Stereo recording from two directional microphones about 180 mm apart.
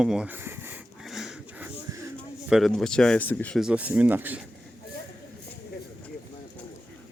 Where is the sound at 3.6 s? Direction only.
5° right (ahead or behind).